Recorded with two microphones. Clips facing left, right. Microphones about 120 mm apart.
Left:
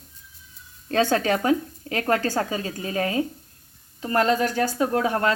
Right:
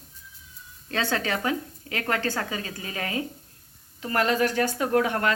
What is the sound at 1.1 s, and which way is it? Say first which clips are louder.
Speech: left 4 dB; 40° left (ahead or behind).